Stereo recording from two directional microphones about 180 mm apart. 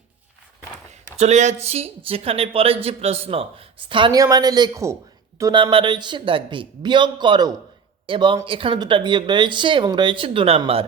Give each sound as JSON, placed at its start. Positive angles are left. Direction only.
{"t": 1.1, "sound": "speech", "side_deg": -40}